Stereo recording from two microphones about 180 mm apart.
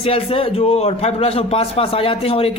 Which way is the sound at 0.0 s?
30° left (ahead or behind).